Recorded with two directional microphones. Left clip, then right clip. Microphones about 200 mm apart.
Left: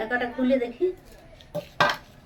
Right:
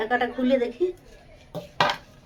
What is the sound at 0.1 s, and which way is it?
Speech, 40° right (ahead or behind).